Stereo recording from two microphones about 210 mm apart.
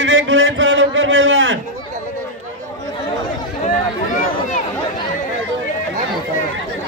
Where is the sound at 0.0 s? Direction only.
60° right (ahead or behind).